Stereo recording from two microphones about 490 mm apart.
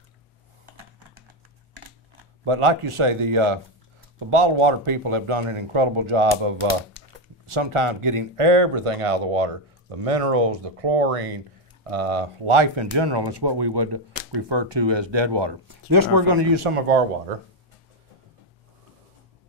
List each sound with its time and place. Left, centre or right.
2.4 s speech: right
7.4 s speech: right
15.9 s speech: right